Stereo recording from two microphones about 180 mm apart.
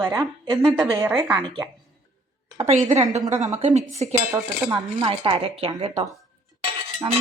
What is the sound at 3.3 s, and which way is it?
A woman's voice, 40° right (ahead or behind).